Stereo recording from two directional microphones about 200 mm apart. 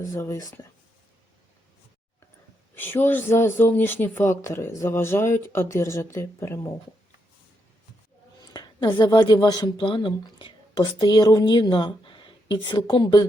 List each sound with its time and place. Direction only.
0.0 s speech: 15° left (ahead or behind)
2.7 s speech: 10° left (ahead or behind)
8.5 s a woman's voice: 20° left (ahead or behind)